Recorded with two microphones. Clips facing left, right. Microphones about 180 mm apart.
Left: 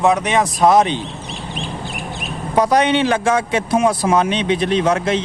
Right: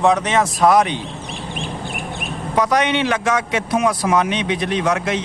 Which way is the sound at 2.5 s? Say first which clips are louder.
Left 3 dB; 30° left (ahead or behind).